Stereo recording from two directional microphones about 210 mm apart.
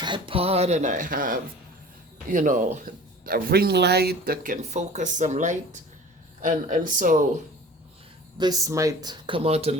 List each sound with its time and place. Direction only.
0.0 s speech: 25° right (ahead or behind); by 7.3 s 40° right (ahead or behind)
8.4 s speech: 15° right (ahead or behind)